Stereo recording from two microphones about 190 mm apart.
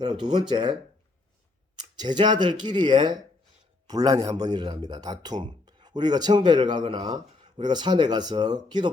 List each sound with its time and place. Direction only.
0.0 s speech: 25° right (ahead or behind)
2.0 s speech: 25° right (ahead or behind)